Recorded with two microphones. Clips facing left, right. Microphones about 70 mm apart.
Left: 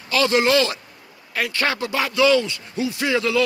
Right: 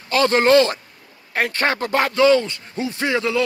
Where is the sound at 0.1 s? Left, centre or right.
Right.